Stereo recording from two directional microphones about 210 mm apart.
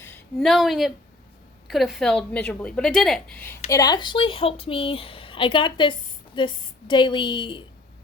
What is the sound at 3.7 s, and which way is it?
A woman's voice, 20° left (ahead or behind).